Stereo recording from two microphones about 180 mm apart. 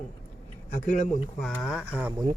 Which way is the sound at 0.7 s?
40° left (ahead or behind).